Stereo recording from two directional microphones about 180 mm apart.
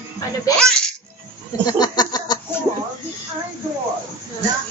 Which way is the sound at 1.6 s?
20° left (ahead or behind).